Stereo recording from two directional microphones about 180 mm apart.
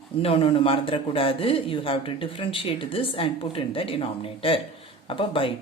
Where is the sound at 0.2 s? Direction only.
30° left (ahead or behind).